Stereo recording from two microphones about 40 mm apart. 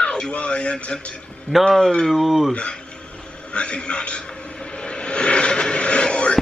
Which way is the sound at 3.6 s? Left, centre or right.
Left.